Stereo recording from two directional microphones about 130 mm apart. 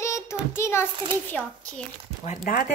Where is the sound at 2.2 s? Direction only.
75° left (ahead or behind).